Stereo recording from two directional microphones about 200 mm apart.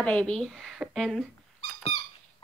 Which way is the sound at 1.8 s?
30° left (ahead or behind).